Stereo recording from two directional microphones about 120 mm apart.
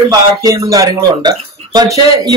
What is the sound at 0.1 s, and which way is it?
Speech, 30° right (ahead or behind).